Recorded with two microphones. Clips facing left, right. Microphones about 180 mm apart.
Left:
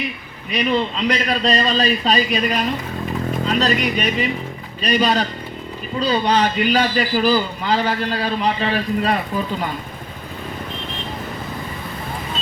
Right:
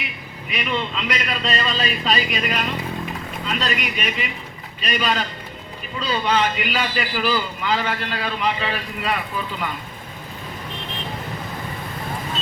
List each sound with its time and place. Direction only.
0.5 s a man's voice: 35° left (ahead or behind)